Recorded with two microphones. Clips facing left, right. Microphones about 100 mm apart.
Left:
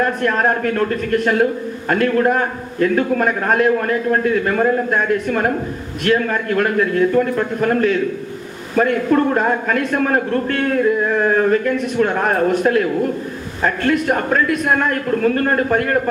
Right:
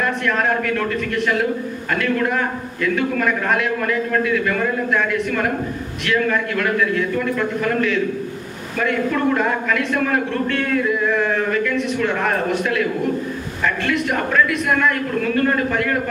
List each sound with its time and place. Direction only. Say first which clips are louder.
0.0 s speech: left 3 dB; 40° left (ahead or behind)